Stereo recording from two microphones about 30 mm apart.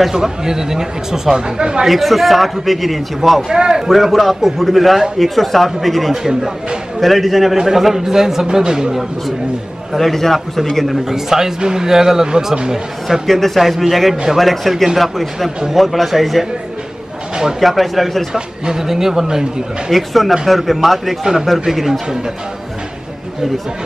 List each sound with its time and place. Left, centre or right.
0.1 s speech: centre
1.9 s a man's voice: centre
3.5 s speech: right
3.9 s a man's voice: centre
7.5 s a man's voice: centre
8.5 s speech: right
9.9 s a man's voice: centre
11.1 s a man's voice: centre
13.6 s a man's voice: centre
17.6 s a man's voice: centre
18.3 s a man's voice: centre
19.9 s a man's voice: centre
21.2 s a man's voice: centre